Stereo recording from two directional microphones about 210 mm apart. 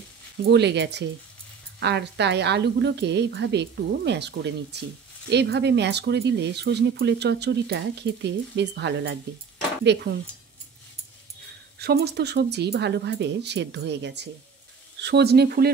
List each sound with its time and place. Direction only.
0.4 s speech: 55° right (ahead or behind)
11.8 s speech: 50° right (ahead or behind)